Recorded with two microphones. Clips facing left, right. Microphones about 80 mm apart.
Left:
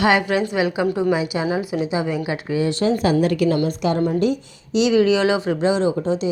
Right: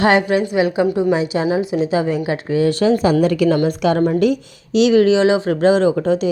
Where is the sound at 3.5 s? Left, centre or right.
Right.